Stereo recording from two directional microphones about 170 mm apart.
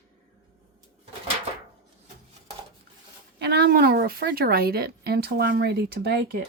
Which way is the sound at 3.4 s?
80° right.